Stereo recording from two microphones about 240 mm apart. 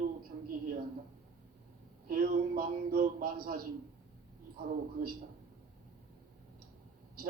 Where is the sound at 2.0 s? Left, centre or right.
Right.